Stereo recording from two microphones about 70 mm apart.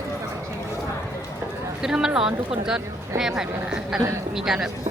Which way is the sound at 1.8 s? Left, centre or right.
Centre.